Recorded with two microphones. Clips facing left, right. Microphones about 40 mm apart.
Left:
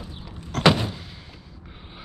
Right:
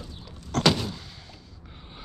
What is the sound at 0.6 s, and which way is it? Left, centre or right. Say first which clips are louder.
Door: left 5 dB; left.